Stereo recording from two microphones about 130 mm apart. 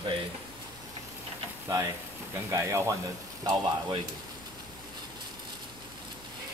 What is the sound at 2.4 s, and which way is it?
Speech, 20° right (ahead or behind).